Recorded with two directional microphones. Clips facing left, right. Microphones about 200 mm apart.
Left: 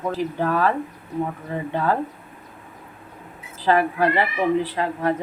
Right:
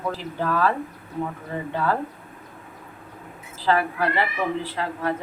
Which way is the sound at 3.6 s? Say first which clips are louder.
Left 3 dB; 20° left (ahead or behind).